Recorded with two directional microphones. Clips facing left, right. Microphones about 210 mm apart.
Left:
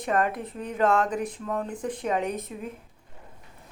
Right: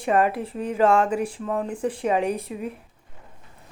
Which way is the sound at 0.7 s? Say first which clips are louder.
Right 4 dB; 10° right (ahead or behind).